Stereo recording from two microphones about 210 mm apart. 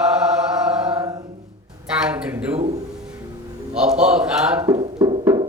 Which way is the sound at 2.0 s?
5° right (ahead or behind).